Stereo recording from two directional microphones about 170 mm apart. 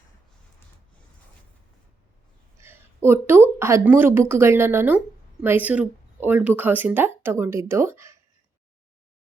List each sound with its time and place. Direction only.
2.6 s speech: 15° right (ahead or behind)